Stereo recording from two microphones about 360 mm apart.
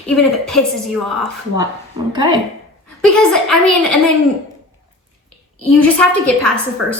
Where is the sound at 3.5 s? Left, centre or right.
Right.